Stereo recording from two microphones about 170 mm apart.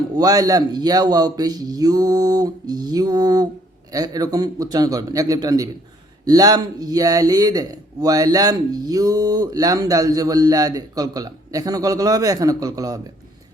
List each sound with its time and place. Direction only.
0.2 s a man's voice: 20° right (ahead or behind)